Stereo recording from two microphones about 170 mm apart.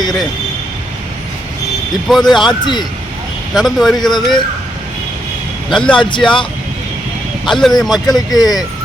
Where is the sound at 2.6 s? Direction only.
25° left (ahead or behind).